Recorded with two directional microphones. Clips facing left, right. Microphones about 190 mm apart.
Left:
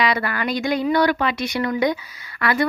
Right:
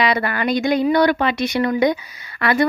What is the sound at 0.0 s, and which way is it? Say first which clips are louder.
Speech: right 2 dB; 25° right (ahead or behind).